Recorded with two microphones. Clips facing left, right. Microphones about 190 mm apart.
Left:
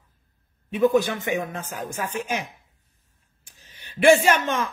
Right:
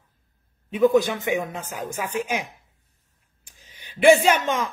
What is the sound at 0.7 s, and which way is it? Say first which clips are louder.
Speech: right 1 dB; 15° right (ahead or behind).